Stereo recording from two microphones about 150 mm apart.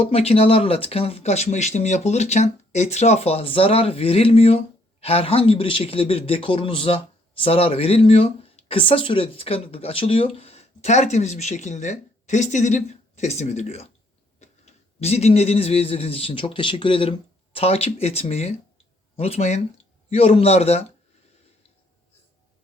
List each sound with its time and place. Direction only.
0.0 s a man's voice: 40° left (ahead or behind)